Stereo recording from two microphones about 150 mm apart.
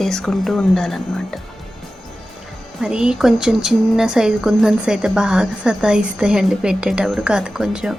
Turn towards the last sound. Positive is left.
turn(degrees=-5)  # may be behind; listen again after turning